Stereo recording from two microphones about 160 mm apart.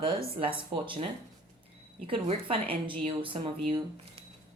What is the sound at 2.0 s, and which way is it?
A woman's voice, 35° right (ahead or behind).